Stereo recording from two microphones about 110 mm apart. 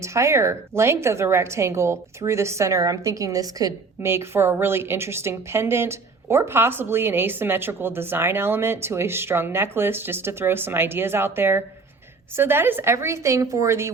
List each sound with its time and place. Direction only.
0.0 s a woman's voice: 25° right (ahead or behind)
4.1 s a woman's voice: 20° right (ahead or behind)